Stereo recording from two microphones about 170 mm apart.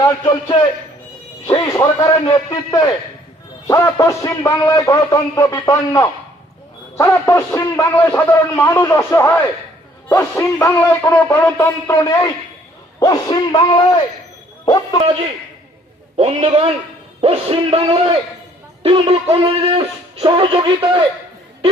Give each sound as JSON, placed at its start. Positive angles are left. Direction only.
{"t": 0.0, "sound": "a man's voice", "side_deg": 25}
{"t": 16.1, "sound": "speech", "side_deg": -35}